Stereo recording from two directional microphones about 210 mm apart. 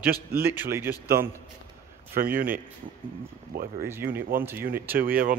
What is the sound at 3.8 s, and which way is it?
A man's voice, 10° right (ahead or behind).